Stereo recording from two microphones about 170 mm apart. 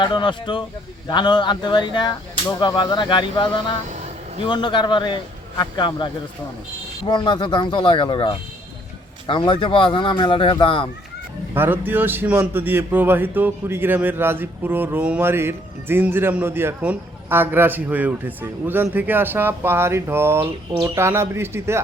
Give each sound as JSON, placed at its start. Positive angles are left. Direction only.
{"t": 0.0, "sound": "speech", "side_deg": 25}
{"t": 3.8, "sound": "vehicle", "side_deg": -40}
{"t": 4.4, "sound": "speech", "side_deg": 25}
{"t": 11.5, "sound": "a man's voice", "side_deg": -10}